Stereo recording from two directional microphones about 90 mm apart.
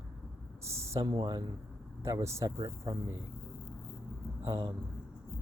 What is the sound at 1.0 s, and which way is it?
Speech, 55° right (ahead or behind).